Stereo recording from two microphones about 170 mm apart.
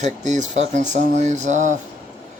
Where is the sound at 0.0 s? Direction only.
45° right (ahead or behind).